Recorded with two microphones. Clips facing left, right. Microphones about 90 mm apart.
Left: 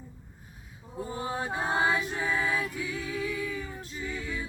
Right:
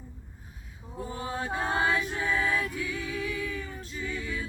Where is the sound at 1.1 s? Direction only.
20° left (ahead or behind).